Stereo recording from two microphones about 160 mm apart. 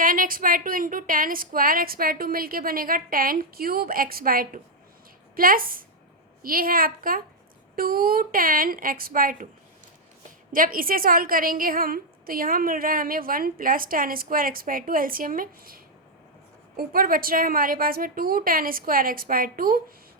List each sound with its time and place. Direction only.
0.0 s a woman's voice: 60° right (ahead or behind)
10.5 s a woman's voice: 60° right (ahead or behind)